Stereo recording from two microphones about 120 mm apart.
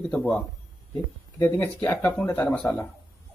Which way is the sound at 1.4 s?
15° left (ahead or behind).